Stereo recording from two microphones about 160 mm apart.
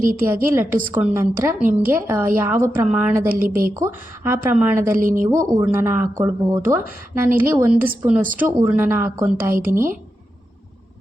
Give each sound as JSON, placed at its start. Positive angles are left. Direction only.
{"t": 0.0, "sound": "a woman's voice", "side_deg": -60}
{"t": 0.5, "sound": "a woman's voice", "side_deg": -15}
{"t": 3.2, "sound": "a woman's voice", "side_deg": -65}
{"t": 3.8, "sound": "a woman's voice", "side_deg": -15}
{"t": 4.9, "sound": "a woman's voice", "side_deg": -55}
{"t": 5.3, "sound": "a woman's voice", "side_deg": -20}